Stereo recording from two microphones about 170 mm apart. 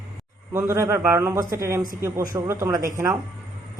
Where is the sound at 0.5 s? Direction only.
15° right (ahead or behind).